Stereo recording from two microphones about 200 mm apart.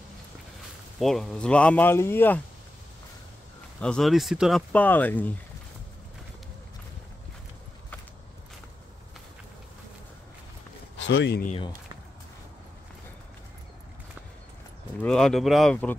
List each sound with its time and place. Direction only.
0.9 s speech: centre (ahead or behind)
3.8 s speech: centre (ahead or behind)
11.0 s speech: 60° left (ahead or behind)
15.0 s speech: 5° left (ahead or behind)